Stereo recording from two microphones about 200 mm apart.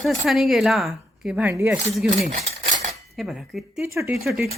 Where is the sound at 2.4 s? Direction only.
35° right (ahead or behind).